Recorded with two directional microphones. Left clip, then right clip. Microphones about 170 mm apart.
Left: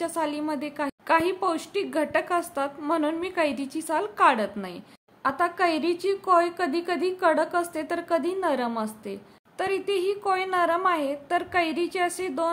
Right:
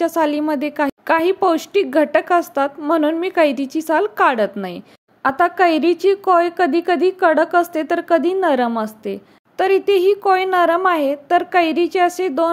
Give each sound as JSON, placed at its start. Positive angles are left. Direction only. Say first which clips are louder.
{"t": 0.0, "sound": "a woman's voice", "louder": "right 11 dB", "side_deg": -40}